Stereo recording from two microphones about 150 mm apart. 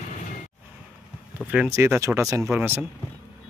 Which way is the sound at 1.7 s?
15° right (ahead or behind).